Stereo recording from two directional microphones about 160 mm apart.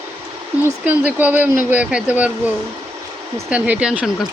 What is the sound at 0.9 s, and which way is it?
Speech, 10° right (ahead or behind).